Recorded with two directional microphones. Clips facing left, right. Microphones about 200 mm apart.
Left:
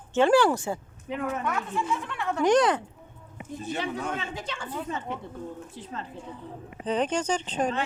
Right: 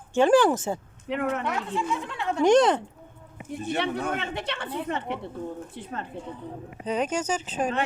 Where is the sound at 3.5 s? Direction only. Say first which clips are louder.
Right 3 dB; 70° right (ahead or behind).